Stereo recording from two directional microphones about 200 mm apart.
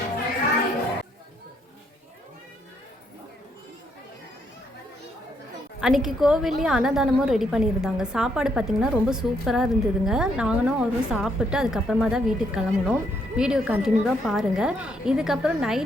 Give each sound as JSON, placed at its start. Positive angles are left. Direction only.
{"t": 5.8, "sound": "a woman's voice", "side_deg": 0}